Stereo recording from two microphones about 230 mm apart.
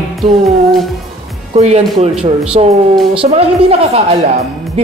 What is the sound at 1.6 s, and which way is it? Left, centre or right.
A woman's voice, right.